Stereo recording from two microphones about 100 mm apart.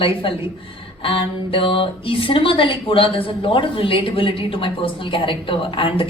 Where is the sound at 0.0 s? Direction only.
60° left (ahead or behind).